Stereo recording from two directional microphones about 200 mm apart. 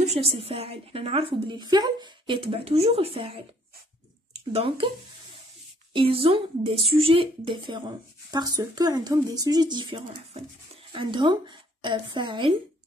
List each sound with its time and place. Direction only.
0.2 s a woman's voice: 30° right (ahead or behind)
5.9 s a woman's voice: 25° right (ahead or behind)